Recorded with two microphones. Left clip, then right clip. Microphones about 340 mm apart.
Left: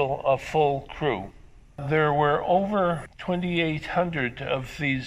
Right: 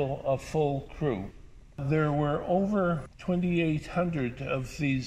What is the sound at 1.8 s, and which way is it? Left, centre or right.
A man's voice, left.